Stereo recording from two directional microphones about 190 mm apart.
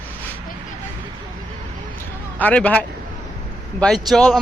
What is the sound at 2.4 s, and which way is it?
A man's voice, 5° left (ahead or behind).